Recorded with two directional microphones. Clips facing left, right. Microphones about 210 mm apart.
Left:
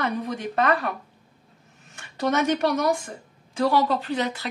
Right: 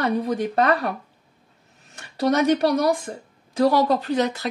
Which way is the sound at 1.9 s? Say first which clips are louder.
Right 3 dB; 35° right (ahead or behind).